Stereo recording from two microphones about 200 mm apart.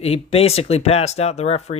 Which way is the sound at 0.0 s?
30° left (ahead or behind).